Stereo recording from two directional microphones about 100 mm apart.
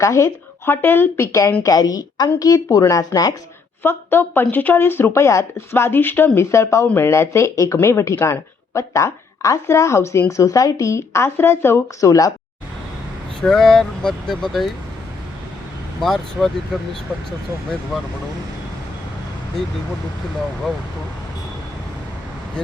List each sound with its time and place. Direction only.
0.0 s a woman's voice: 30° left (ahead or behind)
3.8 s speech: 20° left (ahead or behind)
13.4 s speech: 5° left (ahead or behind)
16.0 s speech: 5° left (ahead or behind)